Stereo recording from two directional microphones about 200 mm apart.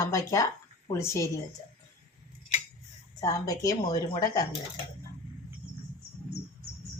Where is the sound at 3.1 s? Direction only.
15° left (ahead or behind).